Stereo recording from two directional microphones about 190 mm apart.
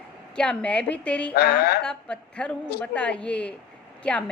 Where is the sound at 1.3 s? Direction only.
60° left (ahead or behind).